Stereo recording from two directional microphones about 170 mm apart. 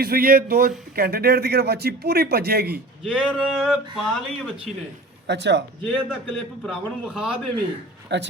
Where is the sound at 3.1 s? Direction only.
5° left (ahead or behind).